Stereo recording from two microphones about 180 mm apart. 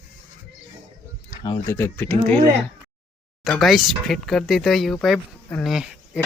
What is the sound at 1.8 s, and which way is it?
Speech, 10° left (ahead or behind).